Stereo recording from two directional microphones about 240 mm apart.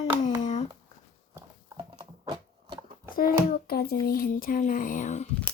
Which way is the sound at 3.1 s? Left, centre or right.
Left.